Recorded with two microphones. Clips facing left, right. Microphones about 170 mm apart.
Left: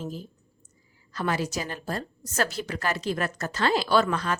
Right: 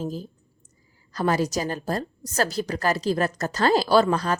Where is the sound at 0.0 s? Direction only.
40° right (ahead or behind).